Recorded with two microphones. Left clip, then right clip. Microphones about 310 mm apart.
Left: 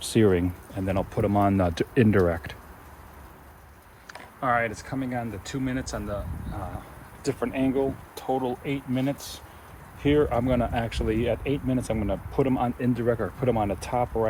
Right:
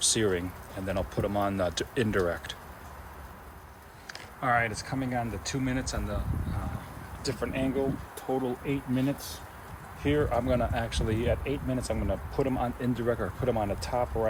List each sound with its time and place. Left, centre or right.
0.1 s speech: centre
4.4 s speech: centre
7.3 s speech: centre
8.3 s speech: left
8.6 s speech: centre
10.0 s speech: left